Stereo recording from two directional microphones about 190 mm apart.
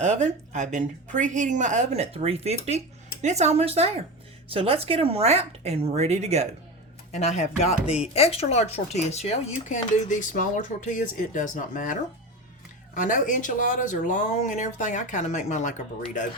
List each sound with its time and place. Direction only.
0.0 s a woman's voice: 40° right (ahead or behind)
7.1 s speech: 35° left (ahead or behind)